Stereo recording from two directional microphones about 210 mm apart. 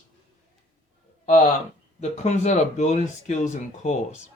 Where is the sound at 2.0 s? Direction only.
35° left (ahead or behind).